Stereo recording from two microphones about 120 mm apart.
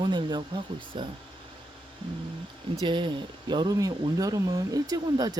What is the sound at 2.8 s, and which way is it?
Speech, 40° right (ahead or behind).